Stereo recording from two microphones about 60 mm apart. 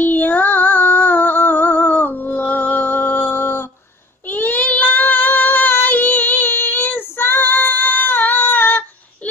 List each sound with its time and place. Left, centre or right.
0.0 s music: left
4.3 s child singing: left